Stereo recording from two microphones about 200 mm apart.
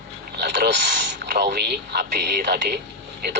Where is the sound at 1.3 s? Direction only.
55° right (ahead or behind).